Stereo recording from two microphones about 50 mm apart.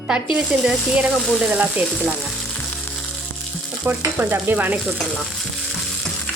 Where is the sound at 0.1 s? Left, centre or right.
Right.